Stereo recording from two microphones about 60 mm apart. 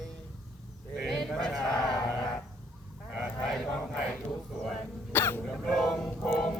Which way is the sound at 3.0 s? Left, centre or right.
Centre.